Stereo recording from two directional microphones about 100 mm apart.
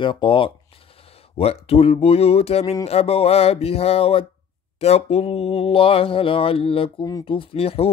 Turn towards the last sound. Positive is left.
turn(degrees=75)  # may be behind; listen again after turning